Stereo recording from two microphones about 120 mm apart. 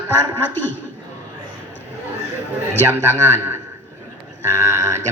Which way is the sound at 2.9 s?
20° right (ahead or behind).